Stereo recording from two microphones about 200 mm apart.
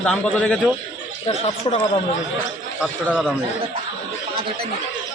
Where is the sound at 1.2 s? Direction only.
25° left (ahead or behind).